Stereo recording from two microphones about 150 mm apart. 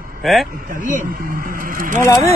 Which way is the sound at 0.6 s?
70° right (ahead or behind).